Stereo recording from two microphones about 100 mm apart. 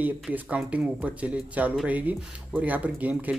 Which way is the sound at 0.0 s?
15° right (ahead or behind).